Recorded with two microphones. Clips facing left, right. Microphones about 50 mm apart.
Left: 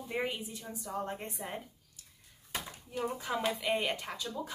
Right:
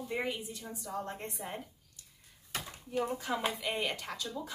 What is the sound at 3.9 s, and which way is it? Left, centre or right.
Speech, centre.